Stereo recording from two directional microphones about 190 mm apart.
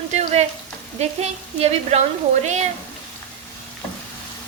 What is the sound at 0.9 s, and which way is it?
Speech, 35° right (ahead or behind).